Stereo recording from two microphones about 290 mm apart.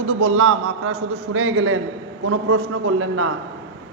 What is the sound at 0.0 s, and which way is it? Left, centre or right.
A man's voice, right.